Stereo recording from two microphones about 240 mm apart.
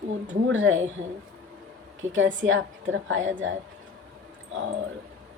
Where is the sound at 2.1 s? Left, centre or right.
Right.